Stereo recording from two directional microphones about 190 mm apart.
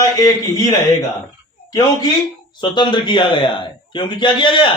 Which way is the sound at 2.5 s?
25° left (ahead or behind).